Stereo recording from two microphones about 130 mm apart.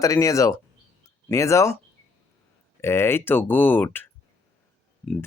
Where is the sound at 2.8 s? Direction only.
20° left (ahead or behind).